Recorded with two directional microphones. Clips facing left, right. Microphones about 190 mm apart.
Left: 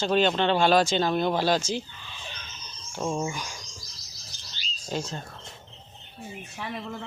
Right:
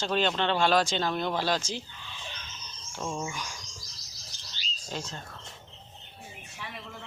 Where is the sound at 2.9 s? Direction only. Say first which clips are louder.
Left 5 dB; 30° left (ahead or behind).